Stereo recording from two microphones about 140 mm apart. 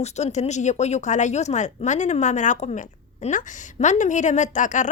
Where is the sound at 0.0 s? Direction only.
55° left (ahead or behind).